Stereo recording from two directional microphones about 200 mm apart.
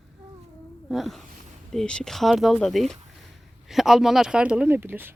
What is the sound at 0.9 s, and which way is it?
Speech, centre (ahead or behind).